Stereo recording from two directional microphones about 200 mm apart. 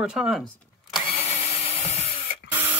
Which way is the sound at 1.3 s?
30° left (ahead or behind).